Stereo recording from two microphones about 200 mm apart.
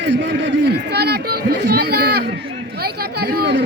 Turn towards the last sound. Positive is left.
turn(degrees=-55)  # may be behind; listen again after turning